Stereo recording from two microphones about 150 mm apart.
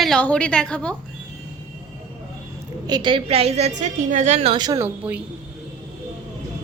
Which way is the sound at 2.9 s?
30° right (ahead or behind).